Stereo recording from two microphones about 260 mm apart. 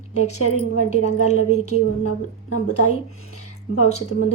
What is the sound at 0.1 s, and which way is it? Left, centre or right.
Speech, left.